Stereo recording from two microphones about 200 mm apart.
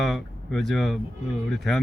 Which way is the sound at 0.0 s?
Centre (ahead or behind).